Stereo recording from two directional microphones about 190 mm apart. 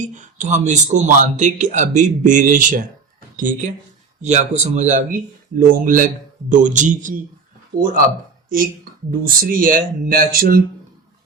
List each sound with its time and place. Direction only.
0.0 s speech: 40° right (ahead or behind)
8.4 s speech: 50° right (ahead or behind)